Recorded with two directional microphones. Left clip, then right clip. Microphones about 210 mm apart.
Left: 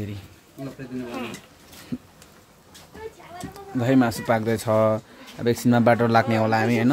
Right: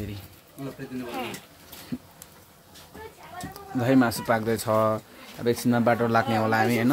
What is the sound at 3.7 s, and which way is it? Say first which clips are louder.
Speech: left 1 dB; 5° left (ahead or behind).